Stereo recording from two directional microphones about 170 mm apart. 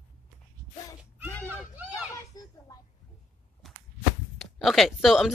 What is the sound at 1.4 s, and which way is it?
Crowd, 10° right (ahead or behind).